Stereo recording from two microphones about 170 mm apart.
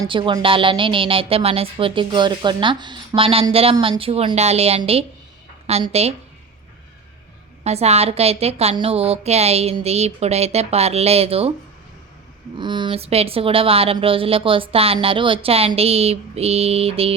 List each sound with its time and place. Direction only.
0.0 s a woman's voice: 30° right (ahead or behind)
7.6 s a woman's voice: 40° right (ahead or behind)
12.5 s a woman's voice: 25° right (ahead or behind)